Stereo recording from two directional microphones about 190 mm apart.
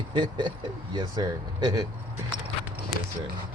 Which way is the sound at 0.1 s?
25° right (ahead or behind).